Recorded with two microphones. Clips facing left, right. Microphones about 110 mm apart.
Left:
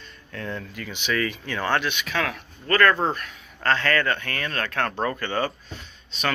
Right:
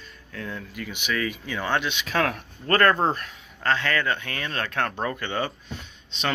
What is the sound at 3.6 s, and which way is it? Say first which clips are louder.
Speech: left 2 dB; 10° right (ahead or behind).